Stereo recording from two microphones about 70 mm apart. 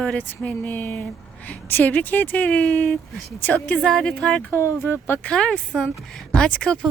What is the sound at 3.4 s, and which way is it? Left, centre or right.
Speech, left.